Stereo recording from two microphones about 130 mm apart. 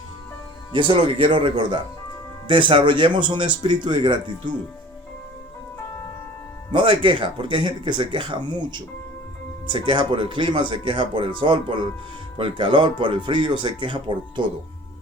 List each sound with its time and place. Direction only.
0.7 s speech: 40° right (ahead or behind)
6.7 s speech: 40° right (ahead or behind)